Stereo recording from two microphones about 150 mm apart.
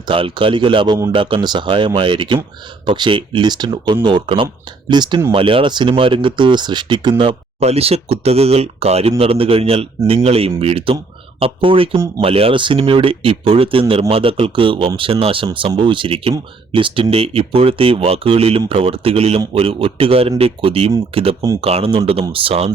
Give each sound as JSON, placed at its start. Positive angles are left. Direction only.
{"t": 0.1, "sound": "speech", "side_deg": -35}